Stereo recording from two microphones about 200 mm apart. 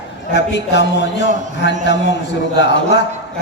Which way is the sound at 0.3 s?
60° left (ahead or behind).